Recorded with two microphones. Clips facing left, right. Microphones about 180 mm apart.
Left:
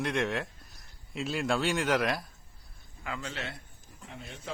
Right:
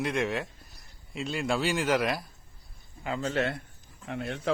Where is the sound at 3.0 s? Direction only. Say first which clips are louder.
Right 7 dB; 30° right (ahead or behind).